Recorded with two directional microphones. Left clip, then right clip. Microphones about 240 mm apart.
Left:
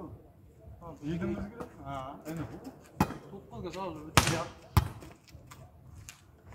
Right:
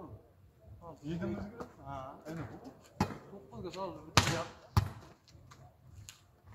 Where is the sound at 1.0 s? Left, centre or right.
Centre.